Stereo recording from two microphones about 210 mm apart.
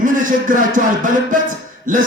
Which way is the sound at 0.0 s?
40° right (ahead or behind).